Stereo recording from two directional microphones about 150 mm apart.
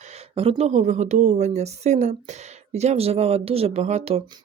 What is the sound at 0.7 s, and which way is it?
A woman's voice, 50° right (ahead or behind).